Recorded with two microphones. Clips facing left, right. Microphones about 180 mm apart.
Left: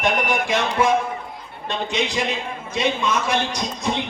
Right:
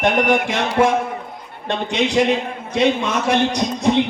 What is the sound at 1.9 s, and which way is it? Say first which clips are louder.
A man's voice: right 8 dB; 60° right (ahead or behind).